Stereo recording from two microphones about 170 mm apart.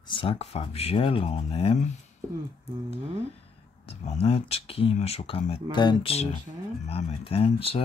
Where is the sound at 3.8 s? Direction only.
35° left (ahead or behind).